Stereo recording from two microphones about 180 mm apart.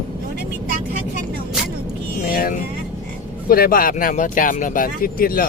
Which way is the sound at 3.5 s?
55° left (ahead or behind).